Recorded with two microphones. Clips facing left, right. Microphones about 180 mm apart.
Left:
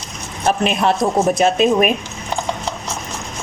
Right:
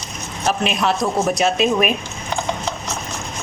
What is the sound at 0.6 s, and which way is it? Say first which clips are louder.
A woman's voice: left 3 dB; 50° left (ahead or behind).